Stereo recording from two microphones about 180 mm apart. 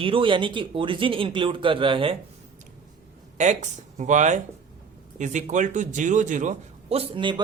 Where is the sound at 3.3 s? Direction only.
40° right (ahead or behind).